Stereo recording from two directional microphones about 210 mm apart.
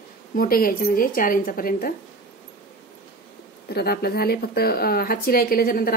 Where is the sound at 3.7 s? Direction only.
50° left (ahead or behind).